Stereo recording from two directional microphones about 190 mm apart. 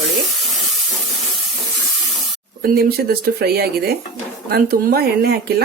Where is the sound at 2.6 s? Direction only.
50° right (ahead or behind).